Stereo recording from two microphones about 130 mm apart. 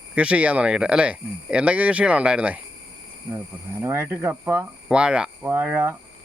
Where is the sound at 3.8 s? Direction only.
20° right (ahead or behind).